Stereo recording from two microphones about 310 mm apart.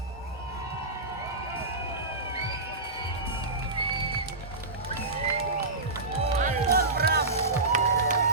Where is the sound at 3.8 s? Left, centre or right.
Centre.